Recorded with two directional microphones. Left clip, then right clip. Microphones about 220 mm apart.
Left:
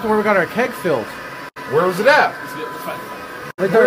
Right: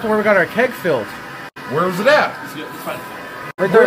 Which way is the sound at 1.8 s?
15° left (ahead or behind).